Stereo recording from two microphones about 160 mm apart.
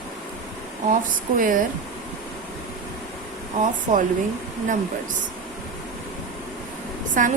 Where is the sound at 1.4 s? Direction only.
60° right (ahead or behind).